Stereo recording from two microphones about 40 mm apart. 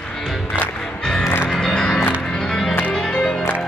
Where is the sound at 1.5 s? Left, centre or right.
Centre.